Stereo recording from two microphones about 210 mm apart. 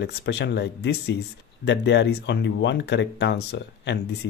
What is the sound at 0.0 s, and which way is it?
Speech, 55° left (ahead or behind).